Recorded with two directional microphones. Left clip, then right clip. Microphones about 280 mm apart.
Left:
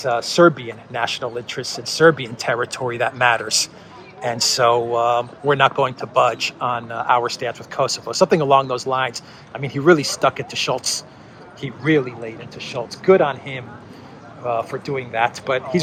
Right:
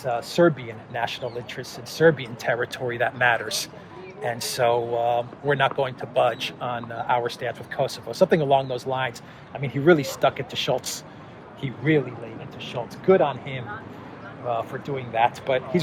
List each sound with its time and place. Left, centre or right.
0.0 s speech: centre